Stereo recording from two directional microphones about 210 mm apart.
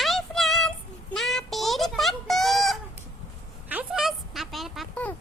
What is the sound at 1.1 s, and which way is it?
Fowl, centre (ahead or behind).